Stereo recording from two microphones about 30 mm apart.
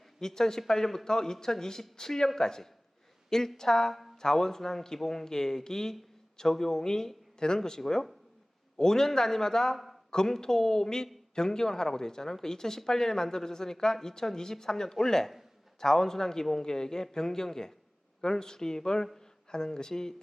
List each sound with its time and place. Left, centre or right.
0.2 s speech: centre
9.7 s a sound: centre
10.2 s speech: centre